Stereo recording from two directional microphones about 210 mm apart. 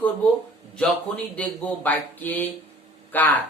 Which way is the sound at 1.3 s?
5° left (ahead or behind).